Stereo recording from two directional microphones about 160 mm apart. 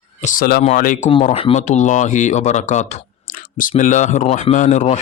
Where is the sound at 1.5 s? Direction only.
50° left (ahead or behind).